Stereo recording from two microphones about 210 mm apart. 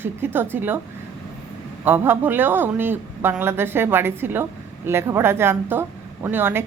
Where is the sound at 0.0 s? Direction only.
10° right (ahead or behind).